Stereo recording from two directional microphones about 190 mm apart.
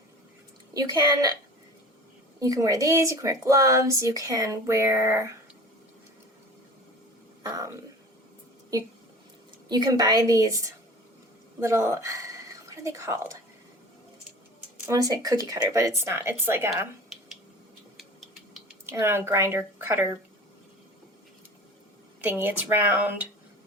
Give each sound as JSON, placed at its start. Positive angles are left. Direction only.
{"t": 0.7, "sound": "a woman's voice", "side_deg": -20}
{"t": 2.4, "sound": "speech", "side_deg": -15}
{"t": 7.4, "sound": "a sound", "side_deg": -20}
{"t": 9.6, "sound": "a woman's voice", "side_deg": -20}
{"t": 14.8, "sound": "speech", "side_deg": -20}
{"t": 17.1, "sound": "finger snapping", "side_deg": 0}
{"t": 17.9, "sound": "a sound", "side_deg": 0}
{"t": 18.9, "sound": "speech", "side_deg": -15}
{"t": 22.2, "sound": "speech", "side_deg": -10}